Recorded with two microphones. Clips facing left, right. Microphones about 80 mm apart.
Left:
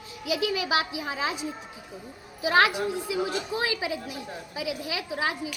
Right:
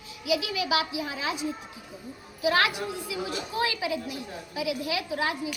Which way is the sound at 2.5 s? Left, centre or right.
Left.